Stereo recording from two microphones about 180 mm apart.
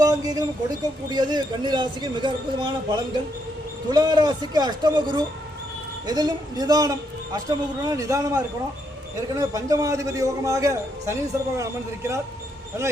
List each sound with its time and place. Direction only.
0.0 s a woman's voice: 20° right (ahead or behind)